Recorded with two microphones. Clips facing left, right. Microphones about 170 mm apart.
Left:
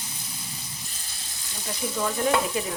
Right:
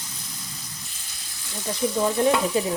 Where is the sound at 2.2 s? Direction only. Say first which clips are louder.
Right 5 dB; 30° right (ahead or behind).